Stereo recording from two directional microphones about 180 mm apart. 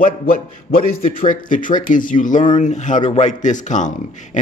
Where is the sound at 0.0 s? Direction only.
55° left (ahead or behind).